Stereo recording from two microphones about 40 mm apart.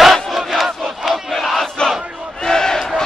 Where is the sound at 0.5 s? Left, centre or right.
Centre.